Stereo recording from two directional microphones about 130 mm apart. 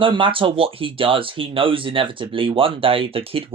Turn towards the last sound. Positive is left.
turn(degrees=-45)  # may be behind; listen again after turning